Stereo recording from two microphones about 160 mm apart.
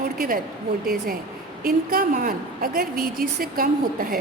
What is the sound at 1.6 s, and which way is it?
A woman's voice, 70° right (ahead or behind).